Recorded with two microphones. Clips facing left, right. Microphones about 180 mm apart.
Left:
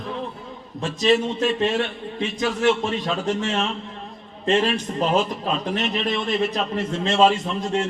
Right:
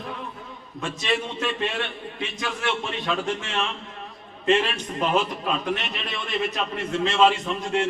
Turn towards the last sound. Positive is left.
turn(degrees=35)  # may be behind; listen again after turning